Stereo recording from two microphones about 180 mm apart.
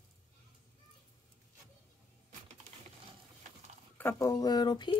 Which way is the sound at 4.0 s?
15° left (ahead or behind).